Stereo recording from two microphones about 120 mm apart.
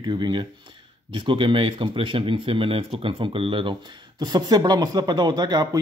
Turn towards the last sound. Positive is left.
turn(degrees=-35)  # may be behind; listen again after turning